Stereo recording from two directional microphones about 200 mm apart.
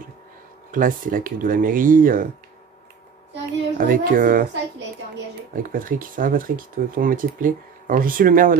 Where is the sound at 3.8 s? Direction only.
45° right (ahead or behind).